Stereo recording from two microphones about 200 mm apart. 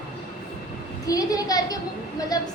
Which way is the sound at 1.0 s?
15° left (ahead or behind).